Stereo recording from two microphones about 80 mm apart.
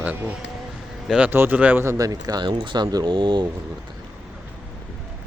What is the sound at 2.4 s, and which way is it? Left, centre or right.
Speech, right.